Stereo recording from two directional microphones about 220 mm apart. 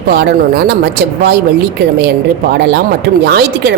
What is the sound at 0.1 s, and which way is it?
A woman's voice, 50° right (ahead or behind).